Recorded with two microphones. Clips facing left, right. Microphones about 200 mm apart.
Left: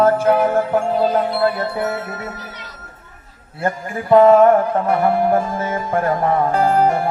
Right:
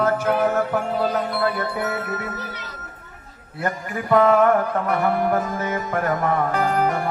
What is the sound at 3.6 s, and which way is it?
Music, 30° left (ahead or behind).